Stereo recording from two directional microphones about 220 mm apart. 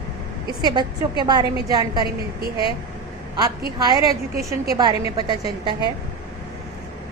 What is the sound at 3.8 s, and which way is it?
A woman's voice, 15° right (ahead or behind).